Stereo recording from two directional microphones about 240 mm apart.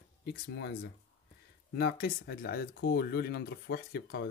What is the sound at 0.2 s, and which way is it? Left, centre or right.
Speech, left.